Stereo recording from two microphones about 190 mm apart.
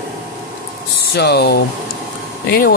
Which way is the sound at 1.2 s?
60° left (ahead or behind).